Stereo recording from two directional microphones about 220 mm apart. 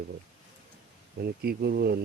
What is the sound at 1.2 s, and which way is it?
Speech, 45° right (ahead or behind).